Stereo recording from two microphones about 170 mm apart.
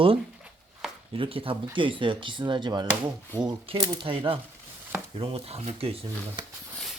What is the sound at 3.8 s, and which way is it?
Speech, 30° right (ahead or behind).